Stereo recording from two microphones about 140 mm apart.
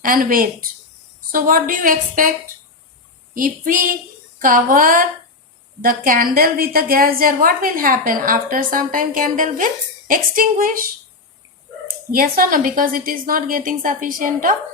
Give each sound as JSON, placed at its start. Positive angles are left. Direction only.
{"t": 0.0, "sound": "a woman's voice", "side_deg": -80}
{"t": 3.3, "sound": "a woman's voice", "side_deg": -75}
{"t": 12.1, "sound": "a woman's voice", "side_deg": -85}